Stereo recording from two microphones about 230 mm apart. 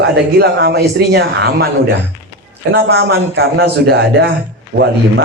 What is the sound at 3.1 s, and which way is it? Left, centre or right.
A man's voice, right.